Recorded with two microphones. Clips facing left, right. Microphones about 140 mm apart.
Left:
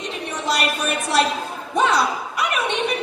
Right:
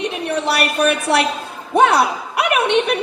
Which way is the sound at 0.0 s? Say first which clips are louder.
Right 7 dB; 65° right (ahead or behind).